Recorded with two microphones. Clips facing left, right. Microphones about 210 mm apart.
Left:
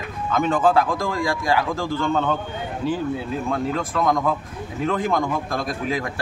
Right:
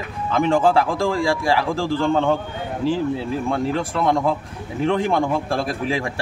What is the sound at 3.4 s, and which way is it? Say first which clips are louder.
A man's voice: right 2 dB; 30° right (ahead or behind).